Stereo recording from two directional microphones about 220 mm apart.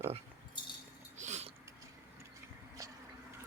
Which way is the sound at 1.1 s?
30° right (ahead or behind).